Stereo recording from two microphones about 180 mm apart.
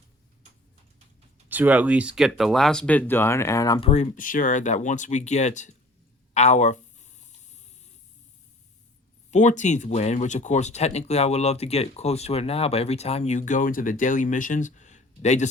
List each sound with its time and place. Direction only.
1.5 s speech: 10° right (ahead or behind); by 3.8 s 20° left (ahead or behind)
3.8 s speech: 35° left (ahead or behind)
6.3 s a sound: 40° left (ahead or behind)
9.3 s speech: 40° left (ahead or behind)